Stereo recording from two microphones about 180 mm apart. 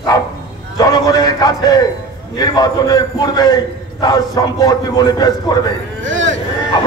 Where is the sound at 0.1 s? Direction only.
20° left (ahead or behind).